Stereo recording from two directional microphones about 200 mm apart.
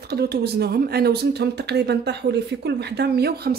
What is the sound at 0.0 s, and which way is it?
Speech, 55° right (ahead or behind).